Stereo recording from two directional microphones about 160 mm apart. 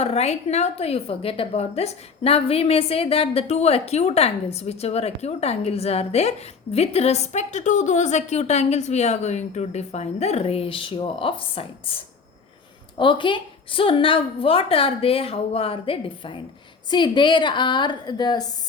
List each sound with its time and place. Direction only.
0.0 s a woman's voice: 40° left (ahead or behind)
13.0 s a woman's voice: 30° left (ahead or behind)